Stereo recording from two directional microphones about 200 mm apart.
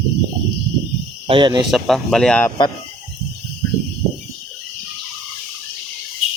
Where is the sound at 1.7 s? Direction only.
Centre (ahead or behind).